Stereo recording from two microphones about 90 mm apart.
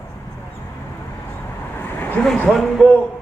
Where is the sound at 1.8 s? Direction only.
20° left (ahead or behind).